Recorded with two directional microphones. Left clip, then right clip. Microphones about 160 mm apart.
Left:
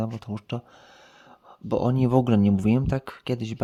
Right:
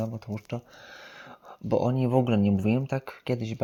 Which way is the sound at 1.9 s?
35° left (ahead or behind).